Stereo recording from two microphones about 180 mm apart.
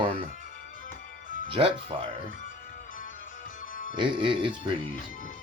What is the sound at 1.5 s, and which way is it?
Speech, 30° right (ahead or behind).